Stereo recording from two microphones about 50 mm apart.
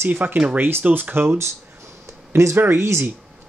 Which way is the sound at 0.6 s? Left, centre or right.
Right.